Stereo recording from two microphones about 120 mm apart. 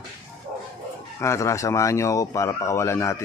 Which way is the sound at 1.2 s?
25° left (ahead or behind).